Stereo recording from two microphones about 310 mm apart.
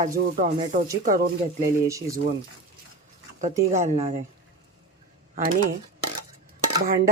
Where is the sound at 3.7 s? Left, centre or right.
Right.